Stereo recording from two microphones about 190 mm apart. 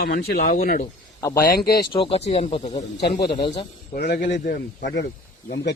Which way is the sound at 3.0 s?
55° left (ahead or behind).